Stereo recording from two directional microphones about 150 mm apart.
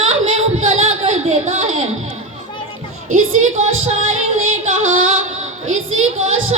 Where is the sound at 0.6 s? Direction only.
45° right (ahead or behind).